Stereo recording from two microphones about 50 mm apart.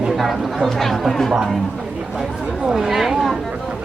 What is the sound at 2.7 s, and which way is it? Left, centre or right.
Speech, centre.